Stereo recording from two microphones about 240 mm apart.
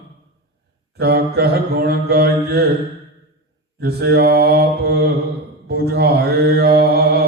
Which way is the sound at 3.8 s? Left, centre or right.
Right.